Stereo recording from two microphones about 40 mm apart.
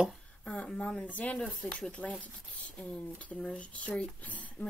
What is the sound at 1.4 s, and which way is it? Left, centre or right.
Speech, left.